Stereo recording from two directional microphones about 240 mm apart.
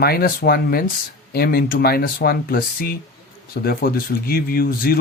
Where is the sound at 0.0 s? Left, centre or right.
Left.